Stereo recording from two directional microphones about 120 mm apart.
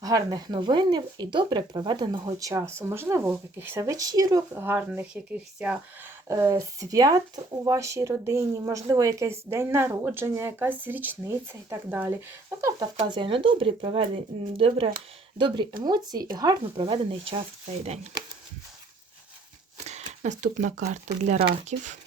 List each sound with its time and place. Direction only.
0.0 s speech: 30° right (ahead or behind)
2.5 s speech: 20° right (ahead or behind)
4.6 s speech: 15° right (ahead or behind)
6.2 s speech: 30° right (ahead or behind)
13.1 s speech: 45° right (ahead or behind)
15.4 s speech: 40° right (ahead or behind)
16.7 s speech: 45° right (ahead or behind)
17.8 s speech: 65° right (ahead or behind)
19.8 s speech: 70° right (ahead or behind)